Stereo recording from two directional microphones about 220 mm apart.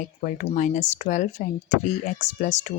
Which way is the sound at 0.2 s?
35° left (ahead or behind).